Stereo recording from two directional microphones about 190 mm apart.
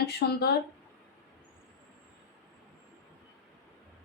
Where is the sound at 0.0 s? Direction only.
55° left (ahead or behind).